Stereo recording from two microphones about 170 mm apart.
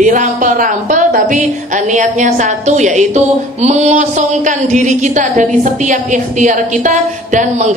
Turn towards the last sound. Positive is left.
turn(degrees=-45)  # may be behind; listen again after turning